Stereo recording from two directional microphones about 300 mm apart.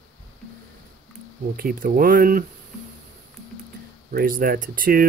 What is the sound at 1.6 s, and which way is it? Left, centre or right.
Speech, right.